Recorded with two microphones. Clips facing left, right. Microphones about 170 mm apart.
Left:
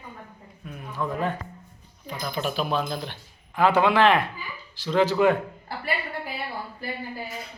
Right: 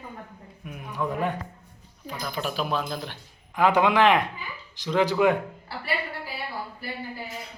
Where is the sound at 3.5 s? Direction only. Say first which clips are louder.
Left 1 dB; 15° right (ahead or behind).